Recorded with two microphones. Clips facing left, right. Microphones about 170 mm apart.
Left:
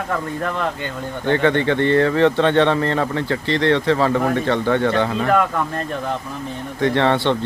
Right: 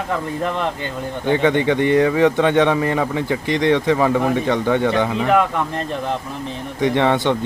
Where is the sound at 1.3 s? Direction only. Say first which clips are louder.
Right 1 dB; 15° right (ahead or behind).